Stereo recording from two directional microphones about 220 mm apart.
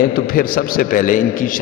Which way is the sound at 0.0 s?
40° left (ahead or behind).